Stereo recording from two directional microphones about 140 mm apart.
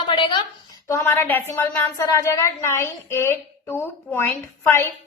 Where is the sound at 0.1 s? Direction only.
35° left (ahead or behind).